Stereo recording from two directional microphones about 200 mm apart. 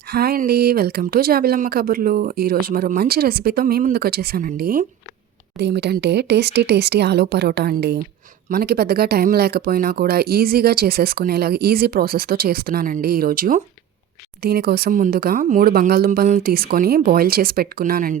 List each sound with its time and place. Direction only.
0.1 s speech: 50° right (ahead or behind)